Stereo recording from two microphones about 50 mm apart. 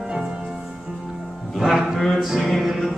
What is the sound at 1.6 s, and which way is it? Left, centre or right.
Music, centre.